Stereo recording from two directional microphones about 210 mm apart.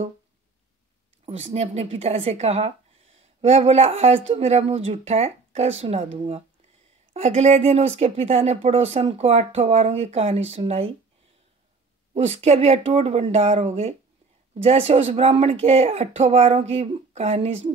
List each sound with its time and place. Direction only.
1.2 s speech: 30° right (ahead or behind)
12.1 s speech: 30° right (ahead or behind)